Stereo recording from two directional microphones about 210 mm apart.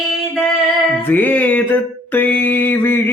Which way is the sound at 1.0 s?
10° left (ahead or behind).